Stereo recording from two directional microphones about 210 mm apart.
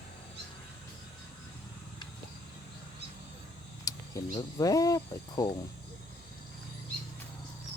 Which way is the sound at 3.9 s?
15° left (ahead or behind).